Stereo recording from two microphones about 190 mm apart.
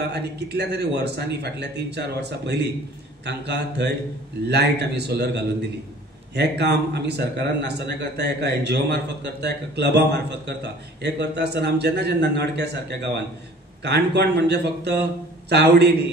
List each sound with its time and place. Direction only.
0.1 s a man's voice: 60° right (ahead or behind)